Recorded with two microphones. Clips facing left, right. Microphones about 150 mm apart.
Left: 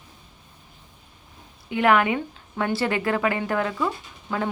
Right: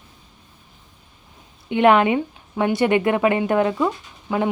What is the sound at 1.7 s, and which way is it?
Speech, 25° right (ahead or behind).